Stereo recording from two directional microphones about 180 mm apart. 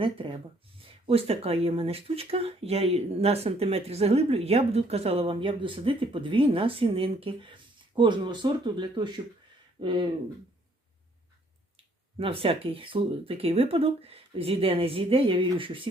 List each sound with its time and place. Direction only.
0.8 s speech: 30° right (ahead or behind)
12.1 s speech: 30° right (ahead or behind)